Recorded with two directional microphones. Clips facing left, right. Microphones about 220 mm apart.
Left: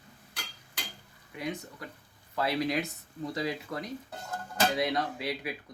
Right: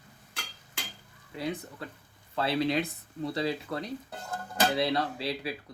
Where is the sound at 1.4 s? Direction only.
30° right (ahead or behind).